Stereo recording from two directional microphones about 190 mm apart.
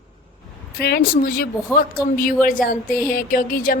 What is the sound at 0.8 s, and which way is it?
A woman's voice, 55° left (ahead or behind).